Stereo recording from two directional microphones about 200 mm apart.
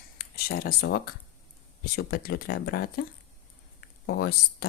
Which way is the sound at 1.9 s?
55° left (ahead or behind).